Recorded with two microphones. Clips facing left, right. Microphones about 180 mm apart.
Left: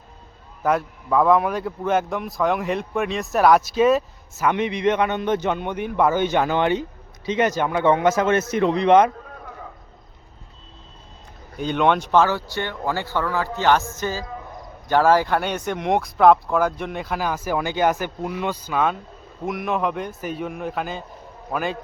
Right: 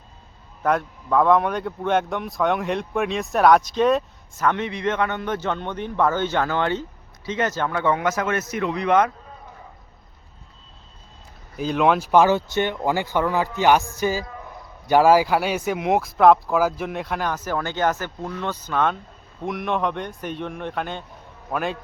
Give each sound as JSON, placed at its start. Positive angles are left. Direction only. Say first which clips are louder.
{"t": 0.6, "sound": "speech", "louder": "left 1 dB", "side_deg": 5}
{"t": 11.5, "sound": "speech", "louder": "even", "side_deg": 0}
{"t": 12.2, "sound": "a man's voice", "louder": "right 3 dB", "side_deg": -20}